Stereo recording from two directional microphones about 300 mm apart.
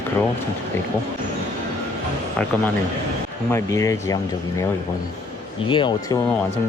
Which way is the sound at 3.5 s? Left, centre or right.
Centre.